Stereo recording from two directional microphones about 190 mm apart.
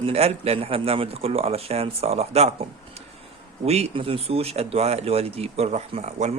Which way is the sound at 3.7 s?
35° right (ahead or behind).